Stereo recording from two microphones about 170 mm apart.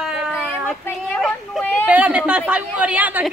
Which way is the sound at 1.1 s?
10° left (ahead or behind).